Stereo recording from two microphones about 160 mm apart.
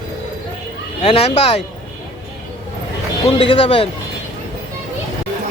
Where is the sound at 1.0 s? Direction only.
35° left (ahead or behind).